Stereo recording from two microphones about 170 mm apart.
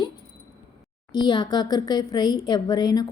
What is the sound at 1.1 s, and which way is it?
Speech, 25° left (ahead or behind).